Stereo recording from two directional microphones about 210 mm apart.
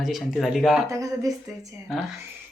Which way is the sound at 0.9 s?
15° right (ahead or behind).